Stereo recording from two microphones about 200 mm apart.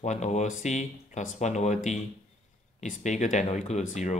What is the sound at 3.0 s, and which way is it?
Speech, 35° left (ahead or behind).